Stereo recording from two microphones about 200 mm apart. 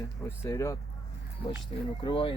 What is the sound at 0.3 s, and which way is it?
Speech, 15° left (ahead or behind).